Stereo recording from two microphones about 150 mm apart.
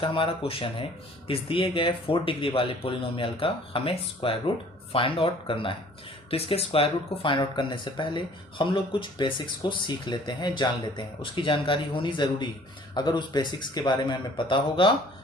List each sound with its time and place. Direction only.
0.0 s speech: 35° left (ahead or behind)